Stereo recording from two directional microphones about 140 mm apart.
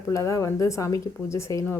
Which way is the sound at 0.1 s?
20° left (ahead or behind).